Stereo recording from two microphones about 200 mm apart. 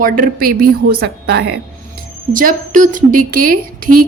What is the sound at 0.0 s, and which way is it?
A woman's voice, 45° right (ahead or behind).